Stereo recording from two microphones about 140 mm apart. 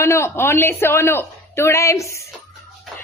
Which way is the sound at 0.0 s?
20° left (ahead or behind).